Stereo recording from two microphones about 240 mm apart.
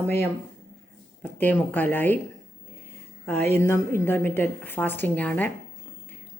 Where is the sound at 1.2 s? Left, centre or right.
Centre.